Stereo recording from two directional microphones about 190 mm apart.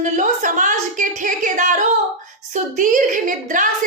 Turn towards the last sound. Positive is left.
turn(degrees=-45)  # may be behind; listen again after turning